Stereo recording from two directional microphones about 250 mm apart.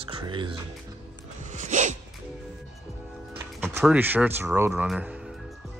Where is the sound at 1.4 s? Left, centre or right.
Right.